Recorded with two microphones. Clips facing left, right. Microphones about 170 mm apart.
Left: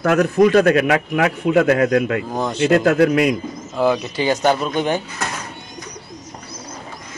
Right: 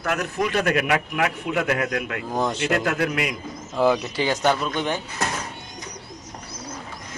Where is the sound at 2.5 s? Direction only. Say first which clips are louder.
Left 9 dB; 35° left (ahead or behind).